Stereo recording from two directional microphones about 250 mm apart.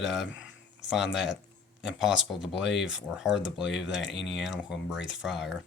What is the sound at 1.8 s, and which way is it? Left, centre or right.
Speech, centre.